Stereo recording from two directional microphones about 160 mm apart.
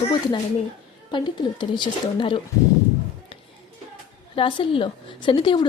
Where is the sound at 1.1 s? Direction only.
30° left (ahead or behind).